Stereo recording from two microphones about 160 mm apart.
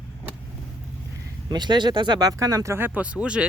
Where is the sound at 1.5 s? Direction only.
25° right (ahead or behind).